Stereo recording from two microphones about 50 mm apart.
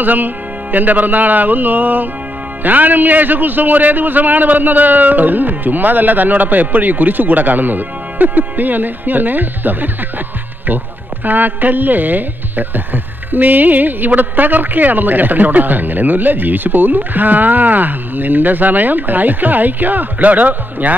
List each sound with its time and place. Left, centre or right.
0.0 s speech: right
11.2 s speech: right